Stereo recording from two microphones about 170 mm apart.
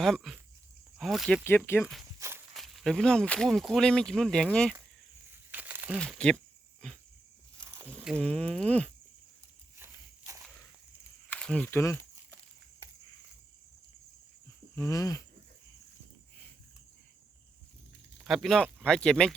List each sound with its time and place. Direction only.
0.0 s speech: centre (ahead or behind)
1.5 s speech: 15° left (ahead or behind)
1.8 s speech: centre (ahead or behind)
2.1 s walk: 15° right (ahead or behind)
2.5 s speech: centre (ahead or behind)
5.3 s crumpling: 10° right (ahead or behind)
6.0 s speech: 5° left (ahead or behind)
7.6 s a sound: 15° right (ahead or behind)
8.2 s speech: 5° left (ahead or behind)
9.7 s walk: 15° right (ahead or behind)
11.3 s speech: 5° left (ahead or behind)
14.8 s a sound: 20° left (ahead or behind)
18.2 s speech: centre (ahead or behind)